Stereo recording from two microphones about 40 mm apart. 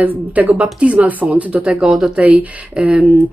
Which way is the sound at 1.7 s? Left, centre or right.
Right.